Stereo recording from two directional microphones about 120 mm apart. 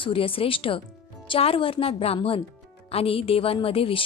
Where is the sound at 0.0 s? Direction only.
50° left (ahead or behind).